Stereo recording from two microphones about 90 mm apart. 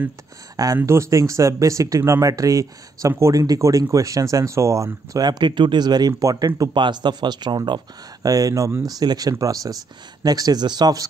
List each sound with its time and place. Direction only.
0.7 s speech: 30° right (ahead or behind)
5.2 s speech: 55° right (ahead or behind); by 6.7 s 40° right (ahead or behind)
6.7 s speech: 60° right (ahead or behind)
8.3 s speech: 40° right (ahead or behind)